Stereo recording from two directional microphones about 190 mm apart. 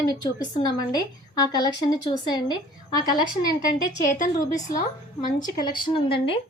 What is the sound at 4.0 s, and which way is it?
Speech, 45° left (ahead or behind).